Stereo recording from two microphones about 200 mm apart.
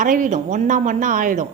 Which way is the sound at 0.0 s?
40° right (ahead or behind).